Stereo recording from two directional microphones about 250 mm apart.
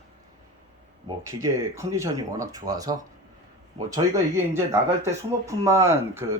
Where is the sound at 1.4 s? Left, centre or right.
Centre.